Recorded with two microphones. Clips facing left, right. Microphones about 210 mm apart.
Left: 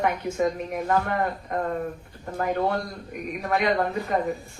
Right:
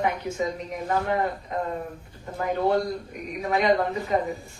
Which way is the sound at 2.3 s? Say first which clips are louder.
Right 2 dB; 55° left (ahead or behind).